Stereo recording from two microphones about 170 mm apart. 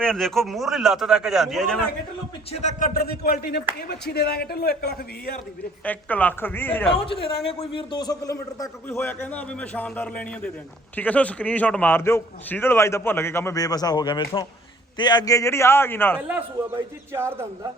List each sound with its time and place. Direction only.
0.0 s a man's voice: 5° left (ahead or behind)
2.5 s speech: 45° left (ahead or behind); by 3.3 s 65° left (ahead or behind)
3.8 s speech: 75° left (ahead or behind)
5.8 s a man's voice: 10° left (ahead or behind)
7.0 s a man's voice: 35° left (ahead or behind); by 16.2 s 15° left (ahead or behind)
17.1 s speech: 15° right (ahead or behind)